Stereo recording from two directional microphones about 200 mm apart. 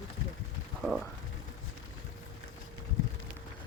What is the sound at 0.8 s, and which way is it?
Speech, centre (ahead or behind).